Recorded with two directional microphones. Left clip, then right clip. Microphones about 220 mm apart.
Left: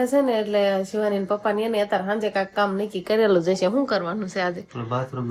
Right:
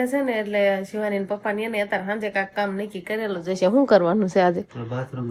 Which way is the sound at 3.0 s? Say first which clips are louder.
Left 9 dB; 40° left (ahead or behind).